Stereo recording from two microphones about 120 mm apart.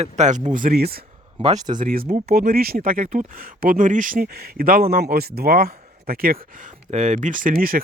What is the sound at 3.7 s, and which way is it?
Speech, 90° right.